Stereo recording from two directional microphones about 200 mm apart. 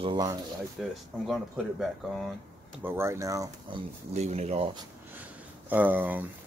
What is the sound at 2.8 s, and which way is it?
Speech, 10° right (ahead or behind).